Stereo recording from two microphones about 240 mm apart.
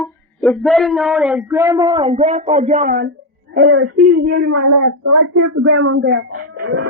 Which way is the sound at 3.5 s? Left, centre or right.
Right.